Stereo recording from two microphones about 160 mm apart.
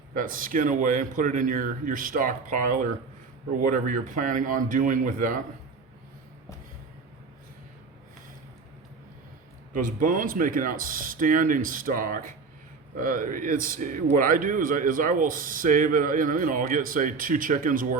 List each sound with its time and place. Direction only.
0.1 s speech: 60° right (ahead or behind)
9.7 s speech: 55° right (ahead or behind)